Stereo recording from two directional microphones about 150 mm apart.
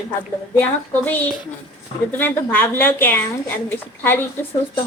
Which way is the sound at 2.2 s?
15° left (ahead or behind).